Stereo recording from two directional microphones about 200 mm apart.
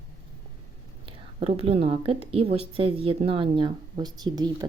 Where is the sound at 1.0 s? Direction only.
30° right (ahead or behind).